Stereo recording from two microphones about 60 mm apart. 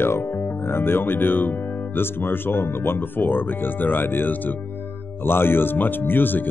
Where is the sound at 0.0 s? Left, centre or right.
Left.